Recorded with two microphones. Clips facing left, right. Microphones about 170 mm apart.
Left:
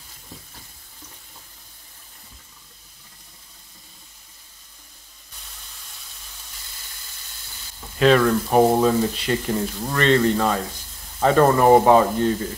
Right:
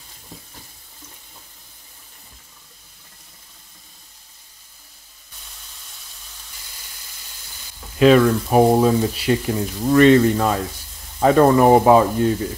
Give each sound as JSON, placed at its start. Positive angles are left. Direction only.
{"t": 8.0, "sound": "speech", "side_deg": -5}